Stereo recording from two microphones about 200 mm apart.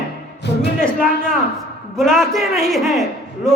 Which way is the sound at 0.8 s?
5° left (ahead or behind).